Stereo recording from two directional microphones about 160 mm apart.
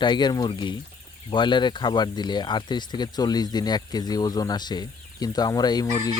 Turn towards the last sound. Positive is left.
turn(degrees=25)  # may be behind; listen again after turning